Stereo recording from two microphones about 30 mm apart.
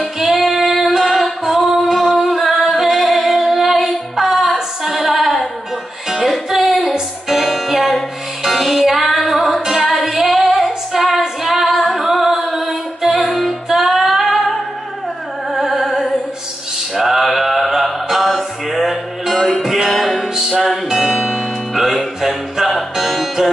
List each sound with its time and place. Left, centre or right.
0.0 s female singing: centre
0.9 s music: centre
2.3 s female singing: centre
4.6 s music: centre
6.8 s music: centre
10.2 s female singing: centre
15.5 s music: centre
16.9 s mantra: centre
18.0 s music: centre
19.9 s music: centre